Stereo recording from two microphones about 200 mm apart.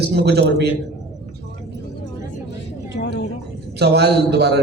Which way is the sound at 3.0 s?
55° left (ahead or behind).